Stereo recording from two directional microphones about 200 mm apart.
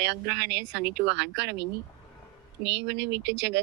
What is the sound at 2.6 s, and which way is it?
Speech, 60° right (ahead or behind).